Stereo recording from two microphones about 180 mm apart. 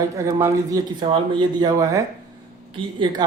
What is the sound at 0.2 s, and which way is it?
A man's voice, 15° right (ahead or behind).